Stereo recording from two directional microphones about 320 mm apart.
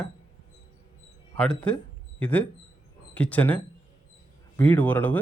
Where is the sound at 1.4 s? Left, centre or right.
Centre.